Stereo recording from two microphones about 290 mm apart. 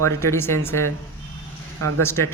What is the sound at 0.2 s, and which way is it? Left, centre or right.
Speech, centre.